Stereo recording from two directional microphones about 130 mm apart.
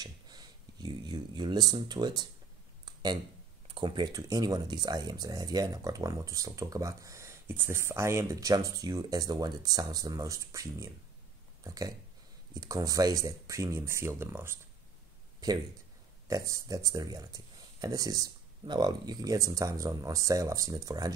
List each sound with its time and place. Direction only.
0.0 s speech: 30° right (ahead or behind)
2.8 s a sound: 30° right (ahead or behind)
3.6 s speech: 40° right (ahead or behind); by 14.6 s 20° right (ahead or behind)
15.4 s speech: 30° right (ahead or behind)